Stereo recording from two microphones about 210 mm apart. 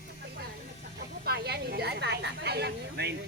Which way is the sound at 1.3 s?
50° right (ahead or behind).